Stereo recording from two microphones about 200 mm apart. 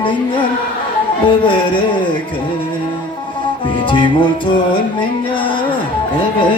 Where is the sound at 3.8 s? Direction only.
25° left (ahead or behind).